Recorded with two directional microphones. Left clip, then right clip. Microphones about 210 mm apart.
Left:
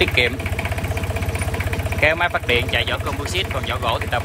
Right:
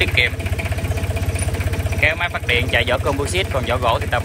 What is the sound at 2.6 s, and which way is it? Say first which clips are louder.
Speech: right 3 dB; 15° left (ahead or behind).